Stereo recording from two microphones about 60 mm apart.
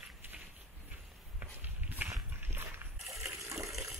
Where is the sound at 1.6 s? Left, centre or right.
Right.